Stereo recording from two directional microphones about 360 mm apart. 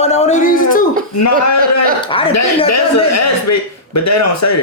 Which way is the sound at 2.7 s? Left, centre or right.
Left.